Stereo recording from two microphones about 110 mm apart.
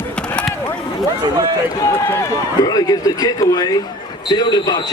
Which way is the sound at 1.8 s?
30° left (ahead or behind).